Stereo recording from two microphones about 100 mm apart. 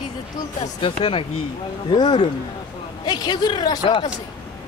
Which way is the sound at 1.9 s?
45° left (ahead or behind).